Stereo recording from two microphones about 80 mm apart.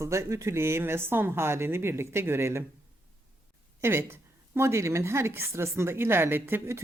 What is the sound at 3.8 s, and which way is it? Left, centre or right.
Speech, right.